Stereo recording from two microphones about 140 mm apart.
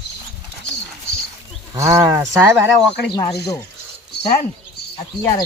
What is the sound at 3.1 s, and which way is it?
Speech, 25° left (ahead or behind).